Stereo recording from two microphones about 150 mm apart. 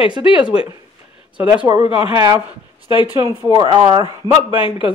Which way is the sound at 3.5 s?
30° right (ahead or behind).